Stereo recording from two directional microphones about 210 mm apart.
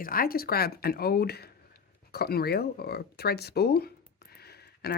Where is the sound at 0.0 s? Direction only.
45° left (ahead or behind).